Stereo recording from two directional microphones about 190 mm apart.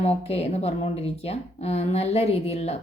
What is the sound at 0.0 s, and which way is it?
Speech, 30° left (ahead or behind).